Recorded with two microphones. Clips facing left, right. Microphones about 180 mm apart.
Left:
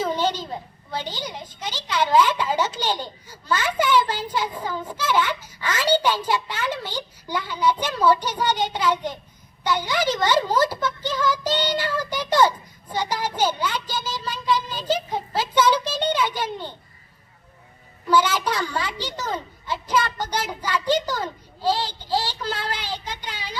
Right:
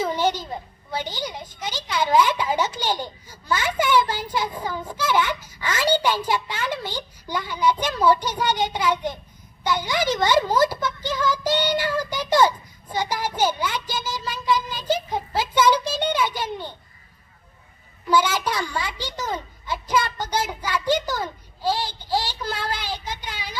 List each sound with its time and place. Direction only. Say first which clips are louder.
0.0 s a sound: right 1 dB; 10° right (ahead or behind)
0.9 s a woman's voice: right 1 dB; 10° right (ahead or behind)
18.1 s a woman's voice: left 1 dB; 10° right (ahead or behind)